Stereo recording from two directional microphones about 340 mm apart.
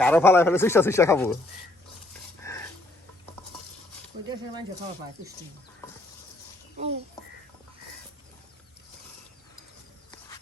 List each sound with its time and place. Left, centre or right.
0.0 s speech: centre
2.4 s dog: centre
6.7 s speech: centre